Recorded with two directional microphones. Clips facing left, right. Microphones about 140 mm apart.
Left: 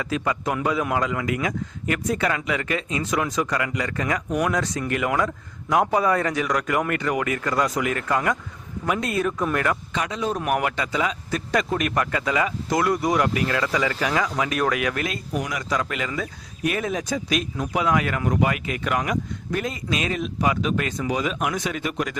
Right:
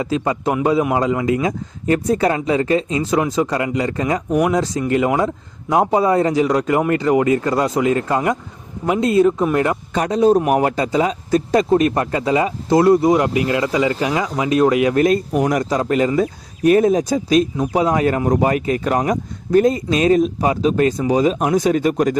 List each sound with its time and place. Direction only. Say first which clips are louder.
0.0 s a man's voice: right 6 dB; 30° right (ahead or behind)
9.9 s a man's voice: right 12 dB; 40° right (ahead or behind); by 15.0 s 25° right (ahead or behind)
15.0 s speech: right 12 dB; 45° right (ahead or behind)
15.7 s speech: right 10 dB; 35° right (ahead or behind)